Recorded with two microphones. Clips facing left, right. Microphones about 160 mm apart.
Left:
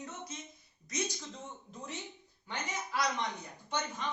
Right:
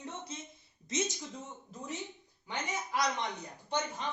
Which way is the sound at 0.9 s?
25° right (ahead or behind).